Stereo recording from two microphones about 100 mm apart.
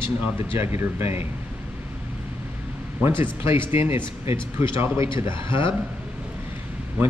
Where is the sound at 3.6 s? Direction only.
25° right (ahead or behind).